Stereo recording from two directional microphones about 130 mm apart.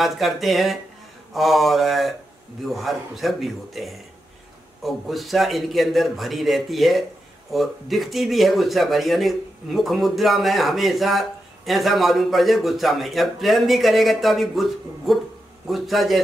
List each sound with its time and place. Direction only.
0.0 s speech: centre (ahead or behind)